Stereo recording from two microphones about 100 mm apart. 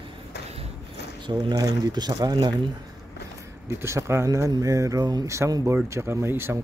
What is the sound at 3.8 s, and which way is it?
Speech, 25° right (ahead or behind).